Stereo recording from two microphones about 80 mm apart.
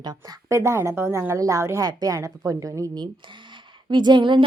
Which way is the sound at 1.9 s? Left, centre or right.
Right.